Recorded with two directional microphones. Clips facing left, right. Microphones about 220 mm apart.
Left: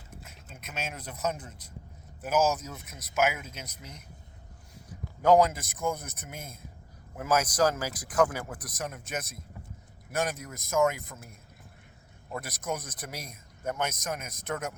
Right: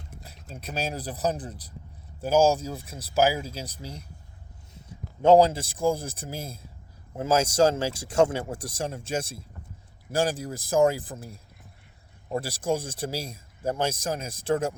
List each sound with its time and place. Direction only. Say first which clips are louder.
0.4 s speech: right 7 dB; 35° right (ahead or behind)